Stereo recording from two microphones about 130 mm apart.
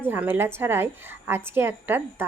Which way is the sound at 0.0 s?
15° right (ahead or behind).